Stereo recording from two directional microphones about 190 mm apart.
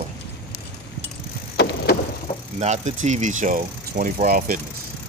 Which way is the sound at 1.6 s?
65° left (ahead or behind).